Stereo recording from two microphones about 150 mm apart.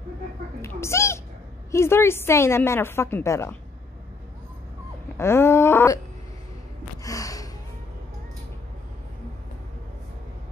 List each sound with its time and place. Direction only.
0.6 s a child's voice: 15° left (ahead or behind)
5.1 s wail: 15° left (ahead or behind)
7.0 s gasp: 20° left (ahead or behind)